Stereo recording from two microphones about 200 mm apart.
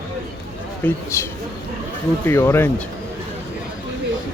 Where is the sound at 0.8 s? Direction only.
10° left (ahead or behind).